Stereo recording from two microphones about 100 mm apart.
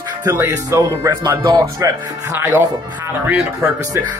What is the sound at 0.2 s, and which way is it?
Speech, 25° right (ahead or behind).